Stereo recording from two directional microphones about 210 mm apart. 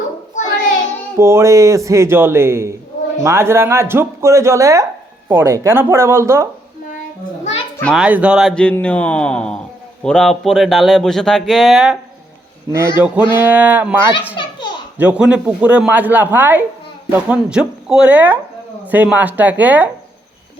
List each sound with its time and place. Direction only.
0.3 s child singing: 35° left (ahead or behind)
1.2 s speech: 15° right (ahead or behind)
7.8 s a child's voice: 5° left (ahead or behind)
8.0 s speech: 5° right (ahead or behind)
13.0 s speech: 10° right (ahead or behind)